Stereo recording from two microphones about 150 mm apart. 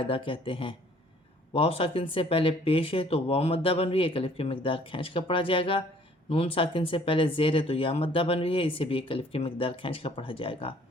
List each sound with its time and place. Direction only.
0.0 s speech: 35° left (ahead or behind)